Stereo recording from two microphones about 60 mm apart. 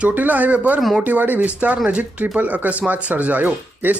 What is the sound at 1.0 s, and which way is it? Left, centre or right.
Speech, right.